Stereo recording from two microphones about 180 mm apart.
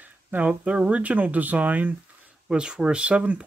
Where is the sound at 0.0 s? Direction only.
10° right (ahead or behind).